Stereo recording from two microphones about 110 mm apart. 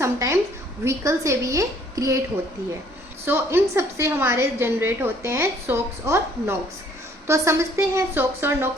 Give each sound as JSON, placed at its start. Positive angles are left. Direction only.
{"t": 0.0, "sound": "a sound", "side_deg": -25}
{"t": 0.9, "sound": "a woman's voice", "side_deg": -30}
{"t": 3.2, "sound": "a woman's voice", "side_deg": -20}